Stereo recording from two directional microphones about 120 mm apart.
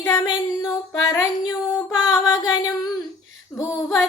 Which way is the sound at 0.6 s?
25° left (ahead or behind).